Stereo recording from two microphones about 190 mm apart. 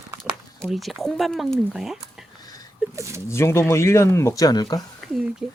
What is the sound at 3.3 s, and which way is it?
Speech, 15° left (ahead or behind).